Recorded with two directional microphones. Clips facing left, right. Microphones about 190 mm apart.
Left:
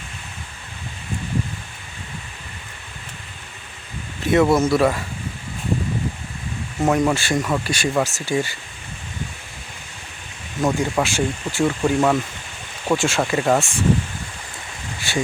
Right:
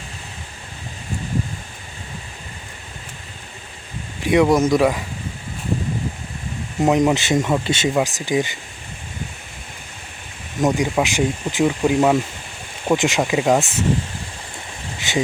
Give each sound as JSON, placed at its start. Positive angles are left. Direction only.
{"t": 4.2, "sound": "speech", "side_deg": -15}
{"t": 6.7, "sound": "speech", "side_deg": -20}
{"t": 10.6, "sound": "speech", "side_deg": -15}
{"t": 15.1, "sound": "speech", "side_deg": -20}